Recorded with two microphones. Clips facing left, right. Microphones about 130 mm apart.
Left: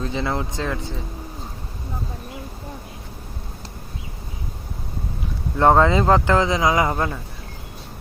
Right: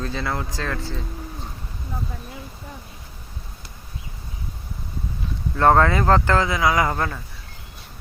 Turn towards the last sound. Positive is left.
turn(degrees=20)  # may be behind; listen again after turning